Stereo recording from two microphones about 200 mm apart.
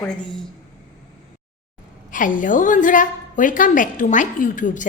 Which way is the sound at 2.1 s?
40° left (ahead or behind).